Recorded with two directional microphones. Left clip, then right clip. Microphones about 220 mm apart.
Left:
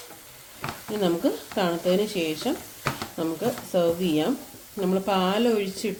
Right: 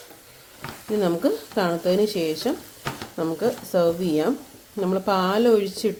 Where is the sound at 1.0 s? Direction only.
30° right (ahead or behind).